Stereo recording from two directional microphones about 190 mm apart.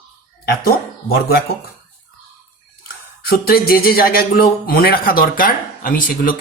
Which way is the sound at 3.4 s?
55° left (ahead or behind).